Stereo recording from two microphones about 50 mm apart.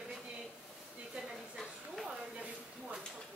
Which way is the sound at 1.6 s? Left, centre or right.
Centre.